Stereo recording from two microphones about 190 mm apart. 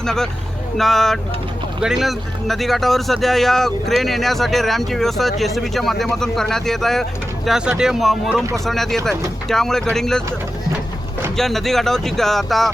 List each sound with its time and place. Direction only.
0.0 s speech: 5° left (ahead or behind)
11.3 s speech: centre (ahead or behind)